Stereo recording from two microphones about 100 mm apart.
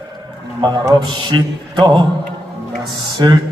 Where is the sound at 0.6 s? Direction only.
45° right (ahead or behind).